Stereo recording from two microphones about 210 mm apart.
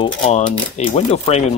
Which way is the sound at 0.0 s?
25° left (ahead or behind).